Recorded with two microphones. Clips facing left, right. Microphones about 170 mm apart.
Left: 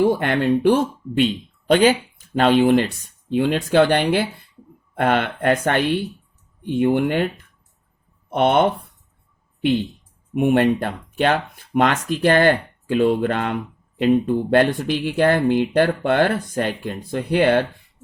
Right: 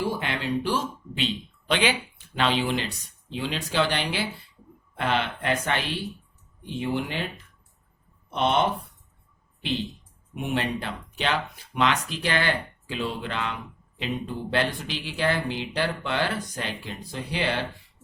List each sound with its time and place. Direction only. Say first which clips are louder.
0.0 s speech: left 11 dB; 55° left (ahead or behind)
8.3 s speech: left 7 dB; 55° left (ahead or behind)
10.3 s speech: left 11 dB; 55° left (ahead or behind)